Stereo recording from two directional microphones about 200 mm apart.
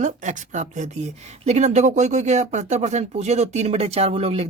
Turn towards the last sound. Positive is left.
turn(degrees=-30)  # may be behind; listen again after turning